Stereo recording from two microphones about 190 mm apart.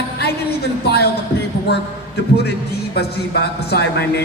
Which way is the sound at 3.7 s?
60° left (ahead or behind).